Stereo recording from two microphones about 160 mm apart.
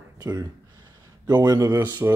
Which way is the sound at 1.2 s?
25° right (ahead or behind).